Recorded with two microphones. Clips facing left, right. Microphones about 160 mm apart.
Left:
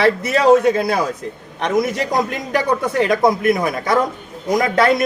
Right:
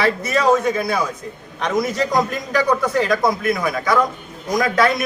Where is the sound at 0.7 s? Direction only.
30° left (ahead or behind).